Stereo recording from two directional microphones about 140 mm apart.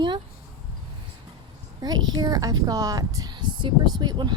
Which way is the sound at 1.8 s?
30° right (ahead or behind).